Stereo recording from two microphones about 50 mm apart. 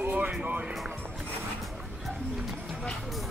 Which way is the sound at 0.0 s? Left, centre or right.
Right.